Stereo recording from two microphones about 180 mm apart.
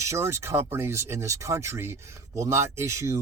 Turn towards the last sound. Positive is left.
turn(degrees=-15)  # may be behind; listen again after turning